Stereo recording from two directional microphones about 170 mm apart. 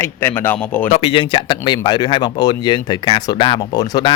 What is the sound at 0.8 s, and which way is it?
Speech, 35° left (ahead or behind).